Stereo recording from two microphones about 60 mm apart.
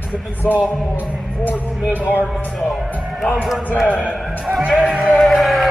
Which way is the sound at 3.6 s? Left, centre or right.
Left.